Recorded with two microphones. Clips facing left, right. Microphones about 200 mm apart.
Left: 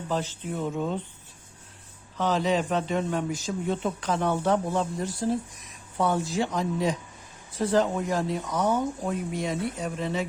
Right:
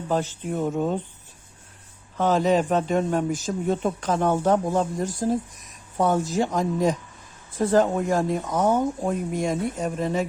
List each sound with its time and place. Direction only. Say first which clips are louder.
0.1 s speech: right 5 dB; 50° right (ahead or behind)
2.1 s speech: right 5 dB; 50° right (ahead or behind)